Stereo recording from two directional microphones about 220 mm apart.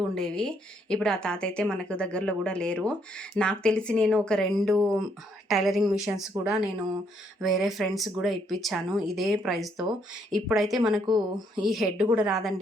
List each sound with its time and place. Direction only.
0.1 s a woman's voice: 5° left (ahead or behind)
11.1 s speech: 20° right (ahead or behind)
11.7 s a woman's voice: centre (ahead or behind)